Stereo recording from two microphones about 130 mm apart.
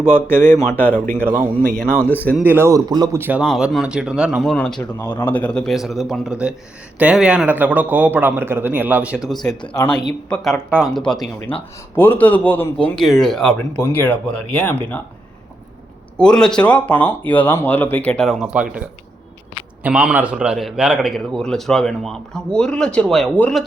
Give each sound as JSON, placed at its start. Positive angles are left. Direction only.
{"t": 0.1, "sound": "speech", "side_deg": 15}
{"t": 2.4, "sound": "a man's voice", "side_deg": -15}
{"t": 3.2, "sound": "a man's voice", "side_deg": -15}
{"t": 3.4, "sound": "a man's voice", "side_deg": 0}
{"t": 4.8, "sound": "a man's voice", "side_deg": 15}
{"t": 10.7, "sound": "a man's voice", "side_deg": -10}
{"t": 10.9, "sound": "a man's voice", "side_deg": 5}
{"t": 11.5, "sound": "speech", "side_deg": 40}
{"t": 11.9, "sound": "speech", "side_deg": 15}
{"t": 12.7, "sound": "a man's voice", "side_deg": 5}
{"t": 13.8, "sound": "speech", "side_deg": 15}
{"t": 16.1, "sound": "speech", "side_deg": 5}
{"t": 18.5, "sound": "a man's voice", "side_deg": -10}
{"t": 19.8, "sound": "a man's voice", "side_deg": -10}